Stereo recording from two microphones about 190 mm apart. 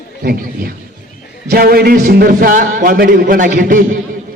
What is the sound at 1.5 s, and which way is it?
A man's voice, 55° right (ahead or behind).